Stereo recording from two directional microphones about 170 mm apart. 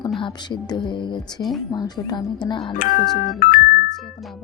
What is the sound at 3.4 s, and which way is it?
Music, 50° left (ahead or behind).